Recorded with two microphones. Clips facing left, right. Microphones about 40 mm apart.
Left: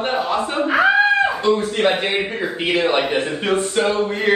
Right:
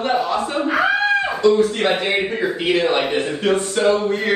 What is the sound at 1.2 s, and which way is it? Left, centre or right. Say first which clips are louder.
A man's voice: right 3 dB; left.